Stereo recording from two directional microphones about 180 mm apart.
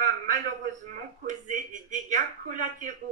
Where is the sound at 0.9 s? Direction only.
45° right (ahead or behind).